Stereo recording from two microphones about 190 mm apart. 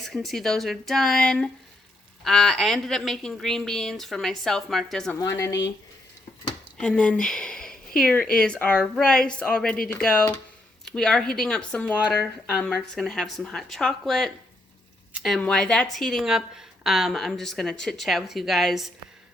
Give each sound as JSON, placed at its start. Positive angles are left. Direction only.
{"t": 0.0, "sound": "speech", "side_deg": 0}
{"t": 5.2, "sound": "speech", "side_deg": 15}
{"t": 6.7, "sound": "speech", "side_deg": 5}
{"t": 11.9, "sound": "speech", "side_deg": -5}